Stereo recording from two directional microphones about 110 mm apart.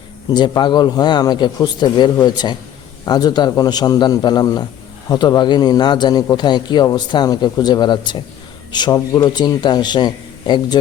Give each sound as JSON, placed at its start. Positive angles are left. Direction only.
{"t": 0.3, "sound": "a man's voice", "side_deg": 40}